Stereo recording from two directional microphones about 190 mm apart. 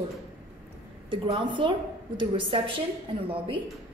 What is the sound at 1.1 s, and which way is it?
A woman's voice, 25° right (ahead or behind).